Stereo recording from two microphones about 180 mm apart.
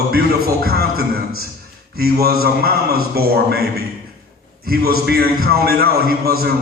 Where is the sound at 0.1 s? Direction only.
55° right (ahead or behind).